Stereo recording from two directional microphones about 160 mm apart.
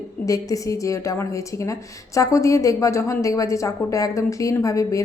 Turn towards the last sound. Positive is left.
turn(degrees=20)  # may be behind; listen again after turning